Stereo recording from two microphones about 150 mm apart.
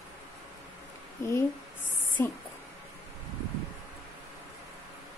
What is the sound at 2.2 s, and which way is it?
Speech, 15° left (ahead or behind).